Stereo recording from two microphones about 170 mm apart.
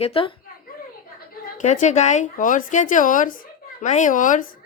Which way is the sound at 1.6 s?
45° left (ahead or behind).